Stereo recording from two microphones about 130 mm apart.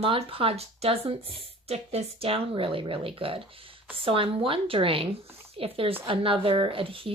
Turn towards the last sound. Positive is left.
turn(degrees=-45)  # may be behind; listen again after turning